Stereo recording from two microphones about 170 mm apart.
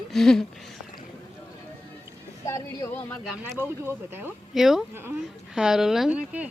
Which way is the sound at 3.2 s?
Centre (ahead or behind).